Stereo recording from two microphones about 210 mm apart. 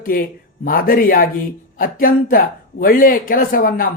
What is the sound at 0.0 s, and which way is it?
Speech, 45° left (ahead or behind).